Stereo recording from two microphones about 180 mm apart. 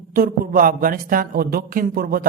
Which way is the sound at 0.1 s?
50° right (ahead or behind).